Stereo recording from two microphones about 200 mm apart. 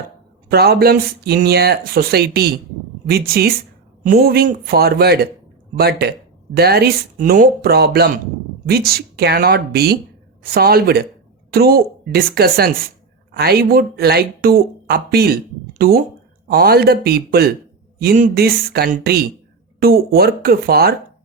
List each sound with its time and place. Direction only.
0.5 s speech: 50° right (ahead or behind)